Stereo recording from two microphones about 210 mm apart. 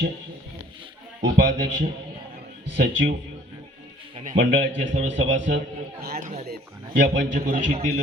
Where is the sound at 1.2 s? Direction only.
55° right (ahead or behind).